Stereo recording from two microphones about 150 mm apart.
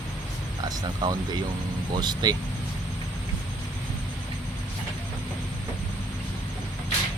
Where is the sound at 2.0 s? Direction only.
30° right (ahead or behind).